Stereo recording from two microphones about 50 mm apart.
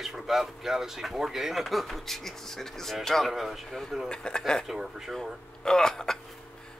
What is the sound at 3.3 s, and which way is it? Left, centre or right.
Speech, centre.